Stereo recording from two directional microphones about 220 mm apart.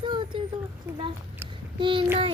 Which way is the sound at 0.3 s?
20° right (ahead or behind).